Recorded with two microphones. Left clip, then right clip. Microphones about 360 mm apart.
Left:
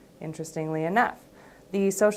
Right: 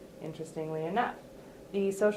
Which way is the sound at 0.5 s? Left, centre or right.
Left.